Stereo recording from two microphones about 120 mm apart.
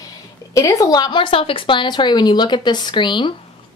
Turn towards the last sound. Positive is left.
turn(degrees=40)  # may be behind; listen again after turning